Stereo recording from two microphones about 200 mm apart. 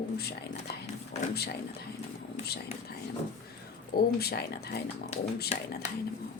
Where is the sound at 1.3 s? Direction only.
50° left (ahead or behind).